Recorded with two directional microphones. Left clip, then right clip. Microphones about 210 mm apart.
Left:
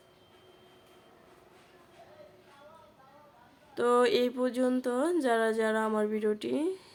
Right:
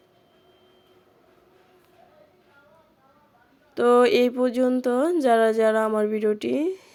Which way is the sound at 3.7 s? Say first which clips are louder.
Right 8 dB; 30° right (ahead or behind).